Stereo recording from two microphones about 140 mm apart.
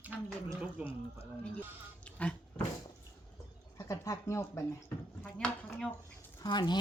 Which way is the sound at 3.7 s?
20° left (ahead or behind).